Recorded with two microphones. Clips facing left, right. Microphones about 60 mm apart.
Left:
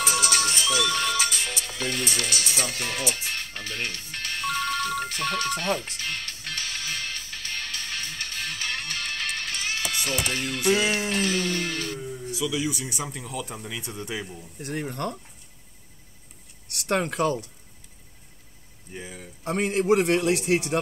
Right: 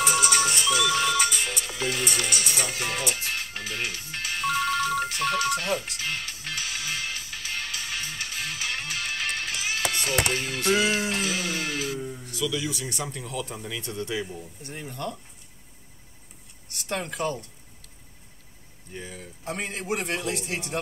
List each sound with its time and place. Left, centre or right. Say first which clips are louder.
0.0 s music: right 2 dB; centre
12.3 s speech: left 2 dB; centre
14.6 s a man's voice: left 6 dB; left
16.6 s speech: left 6 dB; left
18.9 s speech: even; centre
19.4 s a man's voice: left 9 dB; left